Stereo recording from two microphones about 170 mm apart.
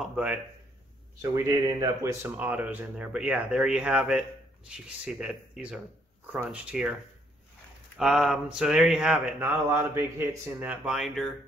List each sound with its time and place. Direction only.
0.0 s speech: 5° right (ahead or behind)
1.2 s speech: 20° right (ahead or behind)
2.3 s speech: 10° right (ahead or behind)
8.0 s speech: centre (ahead or behind)